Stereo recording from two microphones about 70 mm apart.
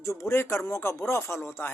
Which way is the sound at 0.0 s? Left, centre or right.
Left.